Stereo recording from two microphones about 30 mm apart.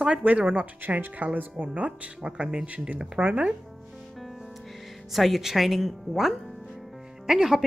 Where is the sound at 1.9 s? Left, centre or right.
Right.